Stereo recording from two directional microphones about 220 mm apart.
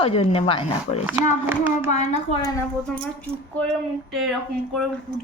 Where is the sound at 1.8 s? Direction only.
30° left (ahead or behind).